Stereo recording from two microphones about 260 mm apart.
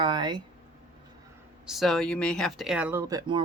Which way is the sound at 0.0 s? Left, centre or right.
Centre.